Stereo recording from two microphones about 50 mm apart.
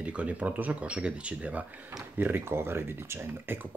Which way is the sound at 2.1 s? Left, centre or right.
Right.